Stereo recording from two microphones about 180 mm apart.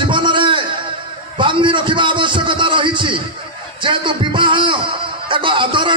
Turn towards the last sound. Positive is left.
turn(degrees=-25)  # may be behind; listen again after turning